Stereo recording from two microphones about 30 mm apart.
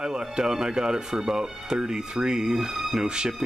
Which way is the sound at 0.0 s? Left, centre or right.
Right.